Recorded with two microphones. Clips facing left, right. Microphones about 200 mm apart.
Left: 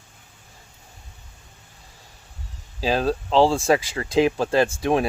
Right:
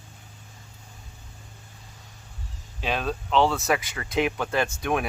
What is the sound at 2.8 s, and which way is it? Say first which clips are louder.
Speech: left 6 dB; 35° left (ahead or behind).